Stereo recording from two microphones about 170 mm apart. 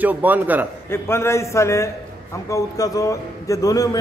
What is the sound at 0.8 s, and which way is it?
A man's voice, 15° left (ahead or behind).